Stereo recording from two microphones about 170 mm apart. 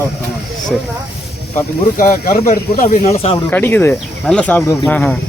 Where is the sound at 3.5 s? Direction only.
10° left (ahead or behind).